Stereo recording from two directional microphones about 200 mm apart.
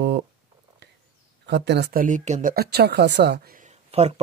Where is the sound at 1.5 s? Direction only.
60° right (ahead or behind); by 2.5 s 35° right (ahead or behind).